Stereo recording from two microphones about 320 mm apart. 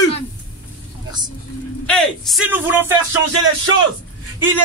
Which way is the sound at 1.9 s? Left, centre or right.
Centre.